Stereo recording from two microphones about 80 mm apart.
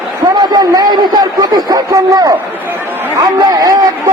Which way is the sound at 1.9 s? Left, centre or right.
Right.